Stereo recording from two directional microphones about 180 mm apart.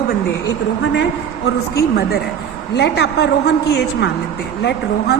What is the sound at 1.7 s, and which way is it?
A woman's voice, 60° left (ahead or behind).